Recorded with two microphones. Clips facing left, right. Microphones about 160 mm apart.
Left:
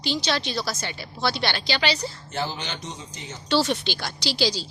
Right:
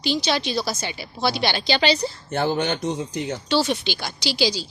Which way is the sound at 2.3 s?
55° right (ahead or behind).